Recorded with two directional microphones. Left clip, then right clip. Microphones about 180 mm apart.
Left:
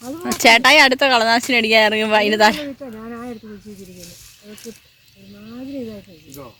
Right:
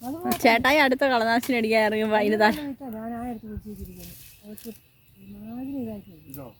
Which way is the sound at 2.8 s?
50° right (ahead or behind).